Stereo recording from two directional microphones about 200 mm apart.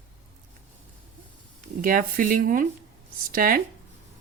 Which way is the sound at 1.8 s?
45° right (ahead or behind).